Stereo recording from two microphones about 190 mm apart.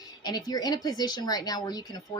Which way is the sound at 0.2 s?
20° left (ahead or behind).